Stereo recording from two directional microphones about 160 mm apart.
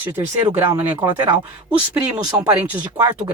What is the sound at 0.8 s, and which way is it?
Speech, 10° right (ahead or behind).